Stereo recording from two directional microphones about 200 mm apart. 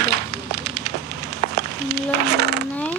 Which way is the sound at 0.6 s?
55° right (ahead or behind).